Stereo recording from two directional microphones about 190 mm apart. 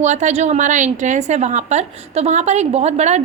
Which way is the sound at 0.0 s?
40° right (ahead or behind).